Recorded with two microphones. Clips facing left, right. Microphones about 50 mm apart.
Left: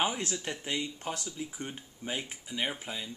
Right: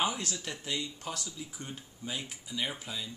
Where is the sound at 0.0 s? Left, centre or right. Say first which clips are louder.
Left 1 dB; left.